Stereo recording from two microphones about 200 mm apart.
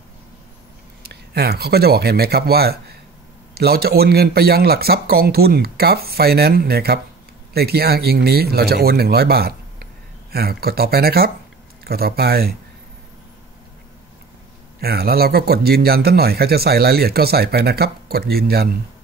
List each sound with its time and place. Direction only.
1.0 s a man's voice: 55° right (ahead or behind)
14.8 s a man's voice: 50° right (ahead or behind)